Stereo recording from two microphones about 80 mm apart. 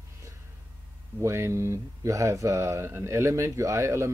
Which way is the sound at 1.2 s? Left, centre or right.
Right.